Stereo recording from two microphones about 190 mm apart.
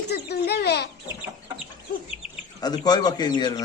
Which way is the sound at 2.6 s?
20° left (ahead or behind).